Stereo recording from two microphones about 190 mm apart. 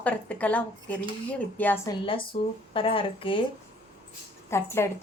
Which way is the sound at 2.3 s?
30° left (ahead or behind).